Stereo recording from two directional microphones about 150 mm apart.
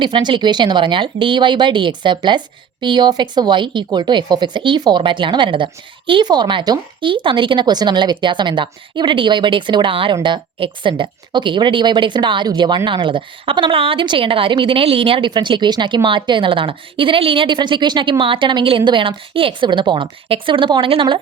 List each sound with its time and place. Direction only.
0.0 s speech: 30° right (ahead or behind)